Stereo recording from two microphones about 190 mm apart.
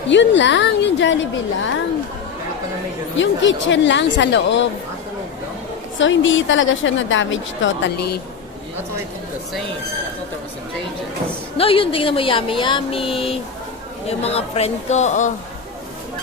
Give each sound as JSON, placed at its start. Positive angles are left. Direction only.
{"t": 0.1, "sound": "speech", "side_deg": 70}
{"t": 3.2, "sound": "speech", "side_deg": 75}
{"t": 6.0, "sound": "a woman's voice", "side_deg": 80}
{"t": 11.5, "sound": "speech", "side_deg": 30}